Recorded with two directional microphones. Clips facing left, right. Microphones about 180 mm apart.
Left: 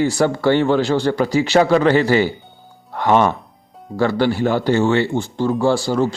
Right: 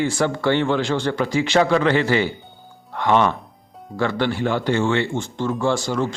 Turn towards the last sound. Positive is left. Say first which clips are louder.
# left 4 dB
turn(degrees=35)  # may be behind; listen again after turning